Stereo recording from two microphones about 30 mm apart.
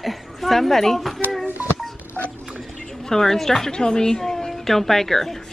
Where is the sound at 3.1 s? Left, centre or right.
Centre.